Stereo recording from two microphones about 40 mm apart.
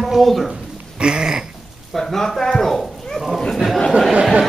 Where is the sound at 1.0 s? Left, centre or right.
Right.